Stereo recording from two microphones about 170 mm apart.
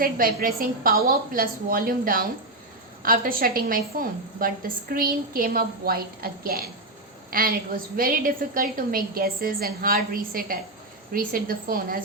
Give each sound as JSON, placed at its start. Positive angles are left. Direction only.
{"t": 0.0, "sound": "a woman's voice", "side_deg": -55}